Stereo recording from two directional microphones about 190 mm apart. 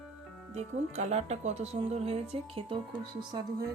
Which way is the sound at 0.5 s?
35° right (ahead or behind).